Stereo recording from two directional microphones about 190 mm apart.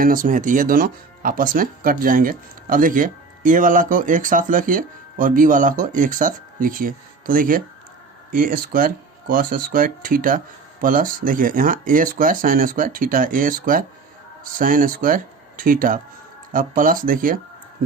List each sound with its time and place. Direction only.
0.0 s speech: 45° right (ahead or behind)